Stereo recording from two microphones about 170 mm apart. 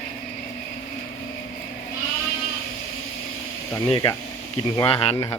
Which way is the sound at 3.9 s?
30° left (ahead or behind).